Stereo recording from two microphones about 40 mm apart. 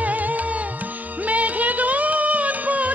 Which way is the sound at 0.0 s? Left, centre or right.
Right.